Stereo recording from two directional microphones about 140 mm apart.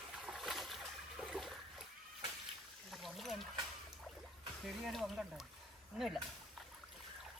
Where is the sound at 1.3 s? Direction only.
Centre (ahead or behind).